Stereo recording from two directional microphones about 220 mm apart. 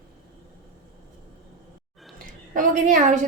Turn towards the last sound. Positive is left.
turn(degrees=-35)  # may be behind; listen again after turning